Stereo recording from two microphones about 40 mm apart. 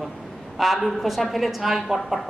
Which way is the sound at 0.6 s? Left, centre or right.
Centre.